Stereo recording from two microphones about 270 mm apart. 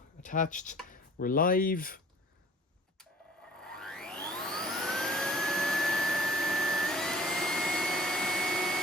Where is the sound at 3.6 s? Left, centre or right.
Centre.